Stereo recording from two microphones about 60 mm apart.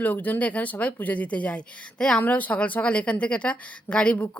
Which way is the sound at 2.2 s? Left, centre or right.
Left.